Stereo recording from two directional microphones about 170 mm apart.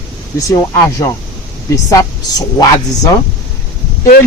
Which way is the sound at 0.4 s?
20° left (ahead or behind).